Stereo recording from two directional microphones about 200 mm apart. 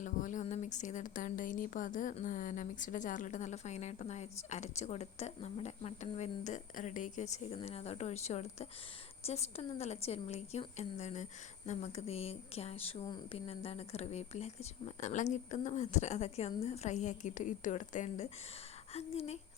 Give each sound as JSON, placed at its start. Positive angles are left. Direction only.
{"t": 0.0, "sound": "a woman's voice", "side_deg": 40}